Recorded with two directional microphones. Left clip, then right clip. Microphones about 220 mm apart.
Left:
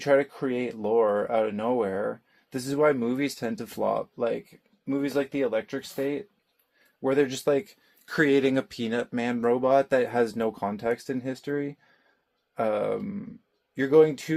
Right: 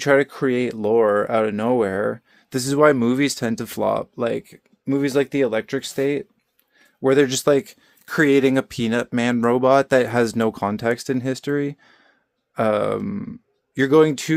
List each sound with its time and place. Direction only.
0.0 s speech: 50° right (ahead or behind)